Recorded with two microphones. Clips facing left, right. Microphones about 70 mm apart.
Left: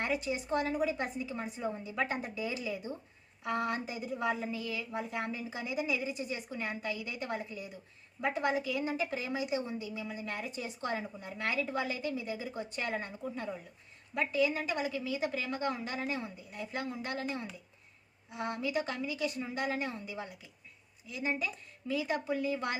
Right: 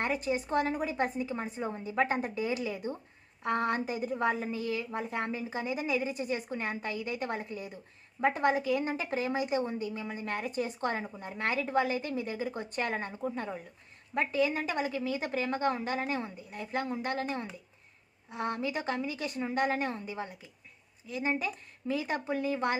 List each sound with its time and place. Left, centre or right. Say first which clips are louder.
0.0 s a woman's voice: right 3 dB; right